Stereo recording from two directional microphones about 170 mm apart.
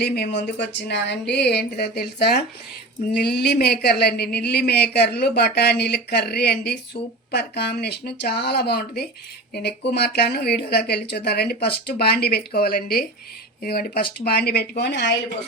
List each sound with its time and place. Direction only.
0.0 s speech: 80° left